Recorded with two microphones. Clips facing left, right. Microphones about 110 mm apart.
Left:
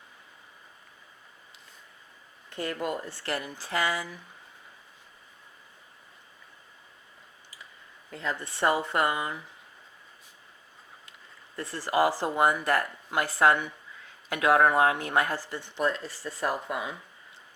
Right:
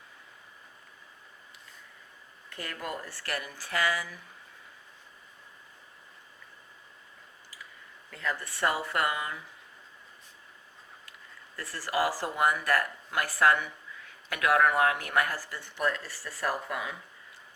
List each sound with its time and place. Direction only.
2.5 s speech: 25° left (ahead or behind)
8.1 s speech: 25° left (ahead or behind)
11.5 s speech: 20° left (ahead or behind)